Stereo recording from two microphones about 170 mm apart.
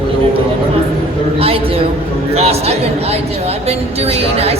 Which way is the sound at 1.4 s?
35° right (ahead or behind).